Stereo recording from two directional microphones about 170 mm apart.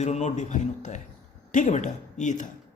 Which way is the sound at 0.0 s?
40° left (ahead or behind).